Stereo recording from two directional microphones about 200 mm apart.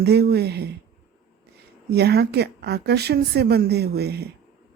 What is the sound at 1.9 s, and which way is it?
Speech, 55° right (ahead or behind).